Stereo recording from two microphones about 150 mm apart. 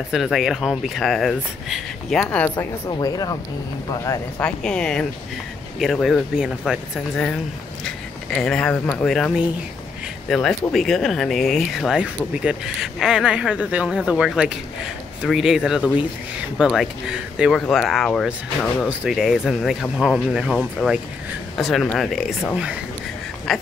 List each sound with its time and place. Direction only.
0.1 s speech: centre (ahead or behind)
3.0 s speech: 25° left (ahead or behind)
4.4 s speech: 5° left (ahead or behind)
10.3 s speech: centre (ahead or behind)
23.5 s speech: centre (ahead or behind)